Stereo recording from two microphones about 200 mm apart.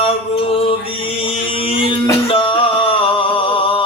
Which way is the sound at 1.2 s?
25° left (ahead or behind).